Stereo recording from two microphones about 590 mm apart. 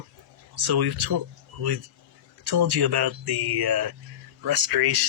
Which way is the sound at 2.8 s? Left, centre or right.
Right.